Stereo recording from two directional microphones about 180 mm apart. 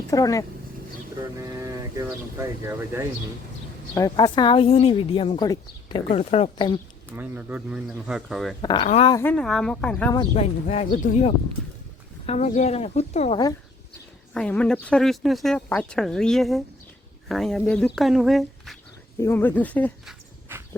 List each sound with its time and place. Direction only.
0.1 s a woman's voice: 20° left (ahead or behind)
1.2 s speech: 20° right (ahead or behind)
3.9 s a woman's voice: 20° left (ahead or behind)
7.1 s speech: 10° right (ahead or behind)
8.6 s a woman's voice: 25° left (ahead or behind)
9.2 s speech: 5° left (ahead or behind)
10.2 s speech: 35° left (ahead or behind)
14.3 s speech: 5° left (ahead or behind)
19.2 s speech: 10° left (ahead or behind)
20.5 s dog: 10° right (ahead or behind)